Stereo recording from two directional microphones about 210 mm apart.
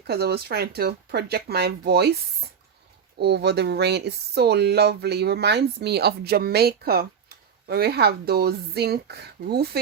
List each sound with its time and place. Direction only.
0.1 s speech: 50° right (ahead or behind)